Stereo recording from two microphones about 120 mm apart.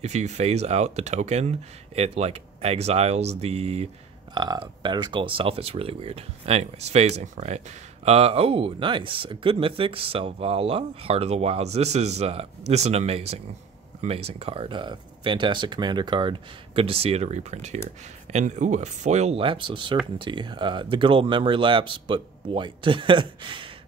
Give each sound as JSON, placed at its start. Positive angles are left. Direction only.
{"t": 0.0, "sound": "speech", "side_deg": -70}
{"t": 4.3, "sound": "speech", "side_deg": -40}
{"t": 18.3, "sound": "speech", "side_deg": -85}
{"t": 19.4, "sound": "speech", "side_deg": -45}